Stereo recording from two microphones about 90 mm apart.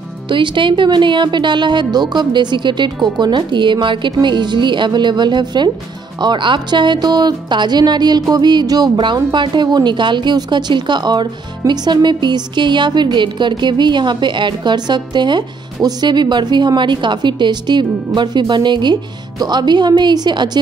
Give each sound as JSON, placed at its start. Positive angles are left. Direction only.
{"t": 0.3, "sound": "speech", "side_deg": -65}